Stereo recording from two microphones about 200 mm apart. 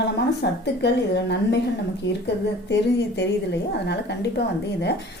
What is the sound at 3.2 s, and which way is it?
A woman's voice, 60° left (ahead or behind).